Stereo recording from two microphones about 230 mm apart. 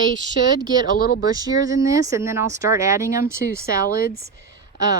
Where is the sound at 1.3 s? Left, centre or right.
Centre.